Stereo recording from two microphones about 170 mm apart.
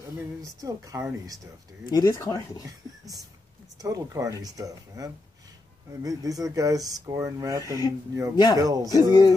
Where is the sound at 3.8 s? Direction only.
20° right (ahead or behind).